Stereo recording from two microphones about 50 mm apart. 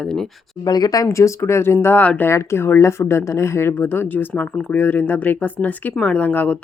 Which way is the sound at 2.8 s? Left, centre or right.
Left.